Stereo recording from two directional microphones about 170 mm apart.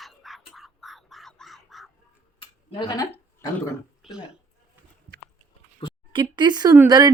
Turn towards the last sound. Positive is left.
turn(degrees=-25)  # may be behind; listen again after turning